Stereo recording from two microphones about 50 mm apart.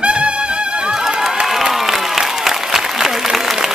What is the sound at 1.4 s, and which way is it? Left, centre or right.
Applause, centre.